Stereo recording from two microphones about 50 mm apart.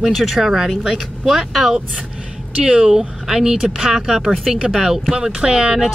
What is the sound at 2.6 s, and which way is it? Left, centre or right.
Speech, right.